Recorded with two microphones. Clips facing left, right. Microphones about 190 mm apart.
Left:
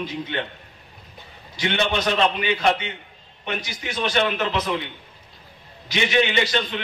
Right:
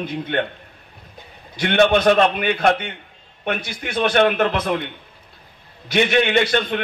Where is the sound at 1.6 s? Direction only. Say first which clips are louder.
Right 8 dB; 55° right (ahead or behind).